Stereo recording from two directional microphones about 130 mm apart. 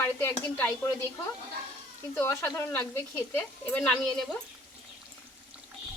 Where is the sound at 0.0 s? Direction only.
20° left (ahead or behind).